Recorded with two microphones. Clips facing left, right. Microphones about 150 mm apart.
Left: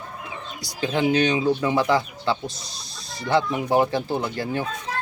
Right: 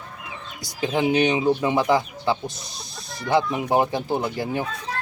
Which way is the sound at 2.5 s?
55° right (ahead or behind).